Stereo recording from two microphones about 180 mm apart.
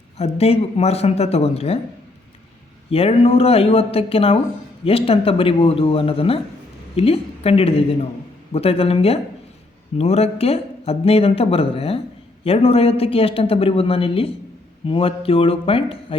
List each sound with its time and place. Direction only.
0.2 s a man's voice: 35° left (ahead or behind)
2.9 s a man's voice: 35° left (ahead or behind)